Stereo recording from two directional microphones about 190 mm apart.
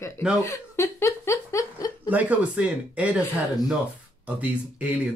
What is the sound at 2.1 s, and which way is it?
Speech, 5° right (ahead or behind).